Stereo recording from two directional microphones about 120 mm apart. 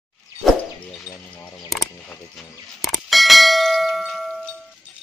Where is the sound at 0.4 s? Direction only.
Centre (ahead or behind).